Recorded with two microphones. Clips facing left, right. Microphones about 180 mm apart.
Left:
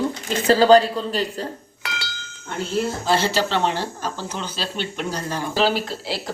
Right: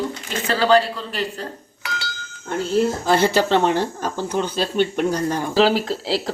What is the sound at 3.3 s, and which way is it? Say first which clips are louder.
Speech: right 4 dB; 50° right (ahead or behind).